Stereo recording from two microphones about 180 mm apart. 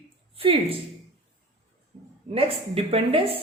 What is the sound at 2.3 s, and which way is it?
A woman's voice, 30° right (ahead or behind).